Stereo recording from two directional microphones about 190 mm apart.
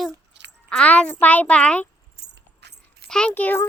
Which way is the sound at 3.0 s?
5° left (ahead or behind).